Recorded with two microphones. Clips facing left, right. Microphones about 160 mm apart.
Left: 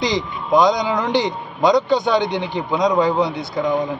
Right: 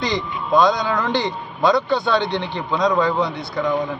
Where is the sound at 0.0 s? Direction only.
20° left (ahead or behind).